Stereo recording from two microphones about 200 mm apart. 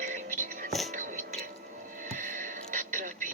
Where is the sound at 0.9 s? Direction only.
40° right (ahead or behind).